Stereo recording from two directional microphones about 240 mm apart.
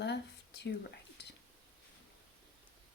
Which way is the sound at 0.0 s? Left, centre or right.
Left.